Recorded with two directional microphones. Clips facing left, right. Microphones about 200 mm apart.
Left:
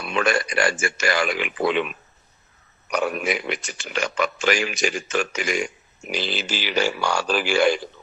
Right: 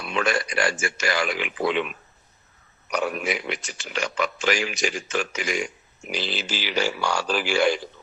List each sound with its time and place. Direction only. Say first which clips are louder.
0.0 s speech: left 2 dB; 55° left (ahead or behind)
2.9 s speech: left 2 dB; 55° left (ahead or behind)